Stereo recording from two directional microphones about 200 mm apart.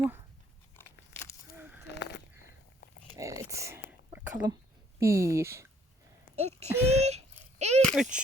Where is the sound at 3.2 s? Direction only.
15° right (ahead or behind).